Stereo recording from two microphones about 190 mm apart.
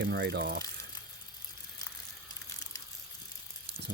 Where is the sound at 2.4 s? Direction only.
20° left (ahead or behind).